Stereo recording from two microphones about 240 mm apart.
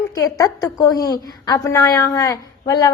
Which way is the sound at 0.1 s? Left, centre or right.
Centre.